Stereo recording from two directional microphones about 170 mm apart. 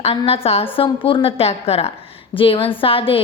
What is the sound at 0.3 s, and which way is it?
A woman's voice, 35° left (ahead or behind).